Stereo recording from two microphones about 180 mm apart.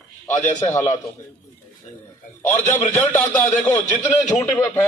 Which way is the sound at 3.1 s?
15° left (ahead or behind).